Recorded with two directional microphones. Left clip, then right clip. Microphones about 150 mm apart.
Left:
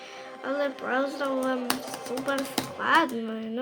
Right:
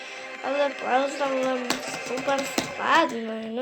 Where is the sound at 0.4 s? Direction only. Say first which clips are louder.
Right 4 dB; 45° left (ahead or behind).